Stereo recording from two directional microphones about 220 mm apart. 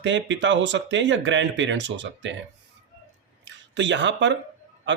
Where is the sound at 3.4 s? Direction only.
55° right (ahead or behind).